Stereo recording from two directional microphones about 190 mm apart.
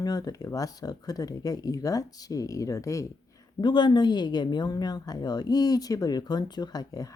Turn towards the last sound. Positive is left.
turn(degrees=20)  # may be behind; listen again after turning